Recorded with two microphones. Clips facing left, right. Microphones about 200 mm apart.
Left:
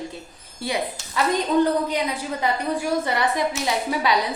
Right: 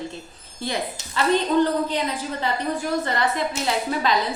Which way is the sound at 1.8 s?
10° left (ahead or behind).